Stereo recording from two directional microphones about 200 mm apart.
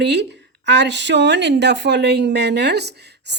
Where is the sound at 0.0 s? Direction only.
60° right (ahead or behind).